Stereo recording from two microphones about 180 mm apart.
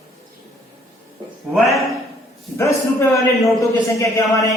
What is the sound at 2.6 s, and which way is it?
A man's voice, 15° left (ahead or behind).